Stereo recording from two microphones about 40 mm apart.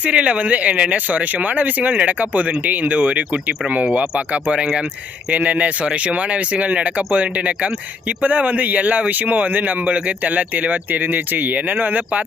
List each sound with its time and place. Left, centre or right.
0.0 s speech: right
4.3 s speech: right
9.9 s speech: right